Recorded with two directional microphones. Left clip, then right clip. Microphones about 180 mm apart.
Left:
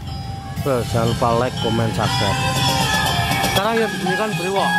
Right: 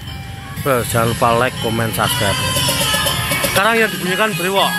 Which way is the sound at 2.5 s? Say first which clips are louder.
Right 1 dB; 45° left (ahead or behind).